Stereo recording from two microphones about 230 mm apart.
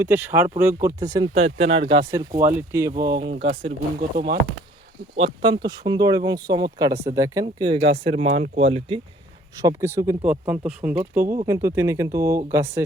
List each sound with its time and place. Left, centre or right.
0.0 s speech: centre
1.3 s speech: right; by 2.9 s centre
2.9 s speech: right
3.2 s speech: right
5.1 s speech: right
9.6 s speech: centre